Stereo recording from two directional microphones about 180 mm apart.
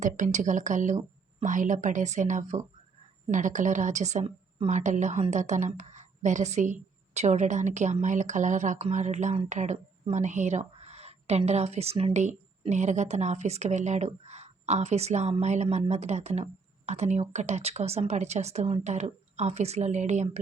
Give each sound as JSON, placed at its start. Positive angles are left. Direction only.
{"t": 0.0, "sound": "a woman's voice", "side_deg": -40}